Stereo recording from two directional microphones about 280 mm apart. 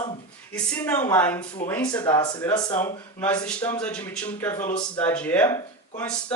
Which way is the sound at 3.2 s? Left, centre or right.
Centre.